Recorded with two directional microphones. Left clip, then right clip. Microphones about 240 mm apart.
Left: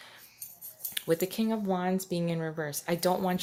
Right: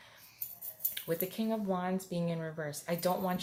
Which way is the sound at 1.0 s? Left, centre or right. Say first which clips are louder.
Left 7 dB; left.